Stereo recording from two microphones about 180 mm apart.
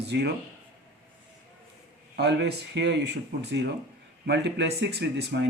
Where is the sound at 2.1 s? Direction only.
70° right (ahead or behind).